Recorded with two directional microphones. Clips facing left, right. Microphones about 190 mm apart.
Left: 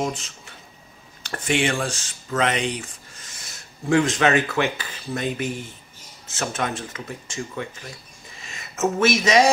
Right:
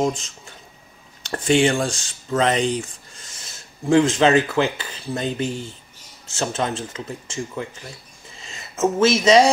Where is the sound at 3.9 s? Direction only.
25° right (ahead or behind).